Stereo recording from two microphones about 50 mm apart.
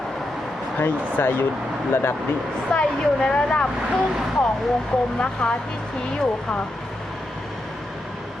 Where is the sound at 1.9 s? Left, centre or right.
Left.